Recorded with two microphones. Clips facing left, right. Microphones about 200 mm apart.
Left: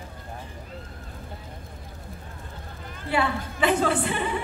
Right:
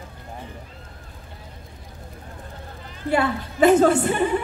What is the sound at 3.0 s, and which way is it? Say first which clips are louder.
A woman's voice: right 4 dB; 45° right (ahead or behind).